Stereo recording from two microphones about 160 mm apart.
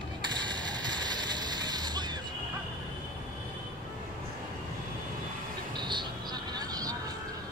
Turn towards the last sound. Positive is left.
turn(degrees=-25)  # may be behind; listen again after turning